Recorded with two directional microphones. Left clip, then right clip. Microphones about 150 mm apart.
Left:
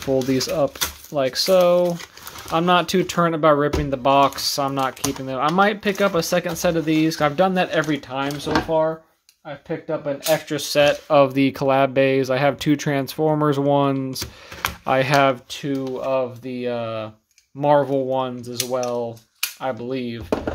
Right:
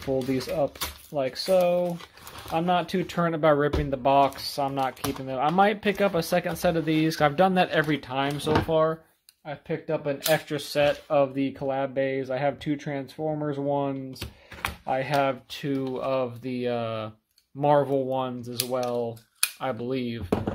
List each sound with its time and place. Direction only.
0.0 s speech: 10° left (ahead or behind); by 10.4 s 15° right (ahead or behind)
10.5 s speech: 15° left (ahead or behind); by 15.3 s 30° left (ahead or behind)
15.9 s speech: 10° right (ahead or behind)